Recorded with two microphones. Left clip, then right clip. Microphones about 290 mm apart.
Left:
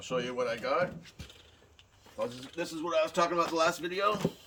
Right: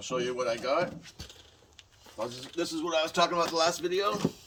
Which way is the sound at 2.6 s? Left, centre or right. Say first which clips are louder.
Right 3 dB; right.